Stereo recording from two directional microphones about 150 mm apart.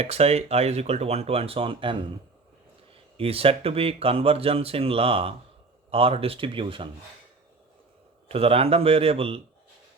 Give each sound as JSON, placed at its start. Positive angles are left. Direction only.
{"t": 0.0, "sound": "speech", "side_deg": -45}
{"t": 3.2, "sound": "speech", "side_deg": -40}
{"t": 8.3, "sound": "speech", "side_deg": -40}